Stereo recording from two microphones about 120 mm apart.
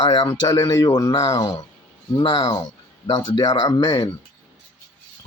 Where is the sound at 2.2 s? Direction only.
45° left (ahead or behind).